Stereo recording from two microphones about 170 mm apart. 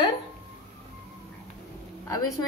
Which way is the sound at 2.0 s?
20° left (ahead or behind).